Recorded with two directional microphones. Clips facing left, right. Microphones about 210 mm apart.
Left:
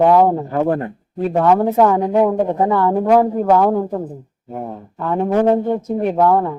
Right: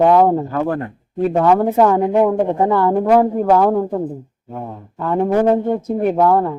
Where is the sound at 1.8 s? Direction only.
5° right (ahead or behind).